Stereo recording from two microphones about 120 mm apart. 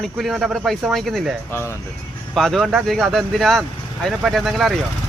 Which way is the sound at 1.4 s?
20° left (ahead or behind).